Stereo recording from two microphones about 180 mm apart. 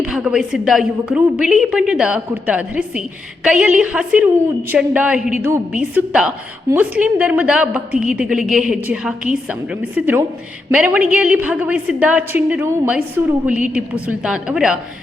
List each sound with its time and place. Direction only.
0.0 s a woman's voice: 5° right (ahead or behind)